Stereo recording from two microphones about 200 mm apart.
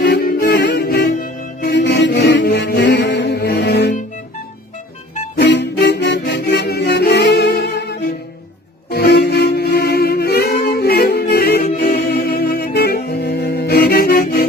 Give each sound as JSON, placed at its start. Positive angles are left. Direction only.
{"t": 0.0, "sound": "music", "side_deg": 50}
{"t": 5.4, "sound": "music", "side_deg": 60}